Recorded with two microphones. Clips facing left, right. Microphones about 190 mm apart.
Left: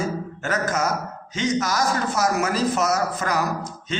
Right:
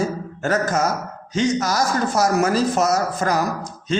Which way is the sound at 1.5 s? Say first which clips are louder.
Right 2 dB; 40° right (ahead or behind).